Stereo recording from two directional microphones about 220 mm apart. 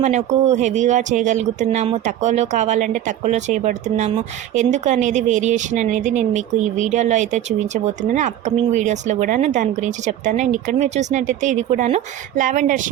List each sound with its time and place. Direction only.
0.0 s speech: 30° right (ahead or behind)